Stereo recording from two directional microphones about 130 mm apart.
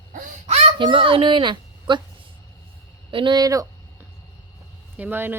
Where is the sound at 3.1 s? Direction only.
40° right (ahead or behind).